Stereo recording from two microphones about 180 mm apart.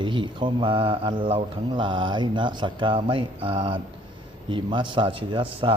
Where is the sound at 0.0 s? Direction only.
25° right (ahead or behind).